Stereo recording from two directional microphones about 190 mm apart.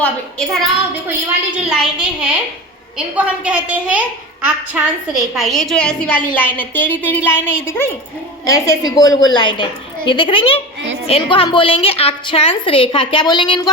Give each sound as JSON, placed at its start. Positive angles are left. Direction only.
{"t": 0.0, "sound": "a woman's voice", "side_deg": 5}
{"t": 1.8, "sound": "a woman's voice", "side_deg": -5}